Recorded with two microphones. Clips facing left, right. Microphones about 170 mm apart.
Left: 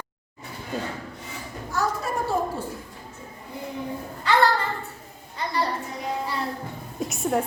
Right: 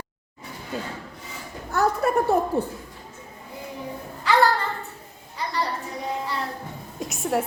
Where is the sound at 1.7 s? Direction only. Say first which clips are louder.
Right 6 dB; 60° right (ahead or behind).